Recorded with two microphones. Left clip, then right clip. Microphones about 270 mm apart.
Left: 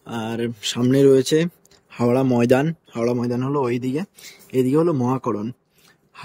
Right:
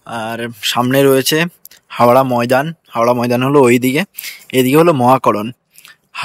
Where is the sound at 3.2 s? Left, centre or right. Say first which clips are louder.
Right 12 dB; right.